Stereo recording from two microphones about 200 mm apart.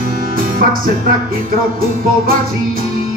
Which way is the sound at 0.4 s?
45° right (ahead or behind).